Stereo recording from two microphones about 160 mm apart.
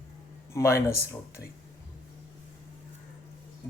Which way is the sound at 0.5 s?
15° left (ahead or behind).